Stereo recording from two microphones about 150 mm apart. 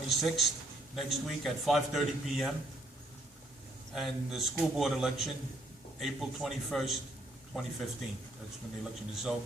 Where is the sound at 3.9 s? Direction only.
Centre (ahead or behind).